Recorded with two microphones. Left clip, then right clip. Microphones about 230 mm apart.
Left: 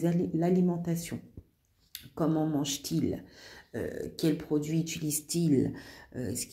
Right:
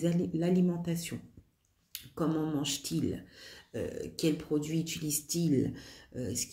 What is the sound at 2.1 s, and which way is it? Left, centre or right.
A woman's voice, centre.